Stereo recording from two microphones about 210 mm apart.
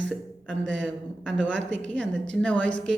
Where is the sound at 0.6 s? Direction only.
60° right (ahead or behind).